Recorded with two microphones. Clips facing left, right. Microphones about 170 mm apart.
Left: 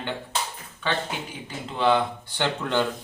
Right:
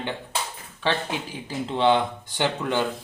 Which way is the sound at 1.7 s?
25° right (ahead or behind).